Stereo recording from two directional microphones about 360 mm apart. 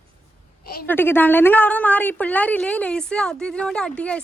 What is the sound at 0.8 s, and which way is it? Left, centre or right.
A woman's voice, centre.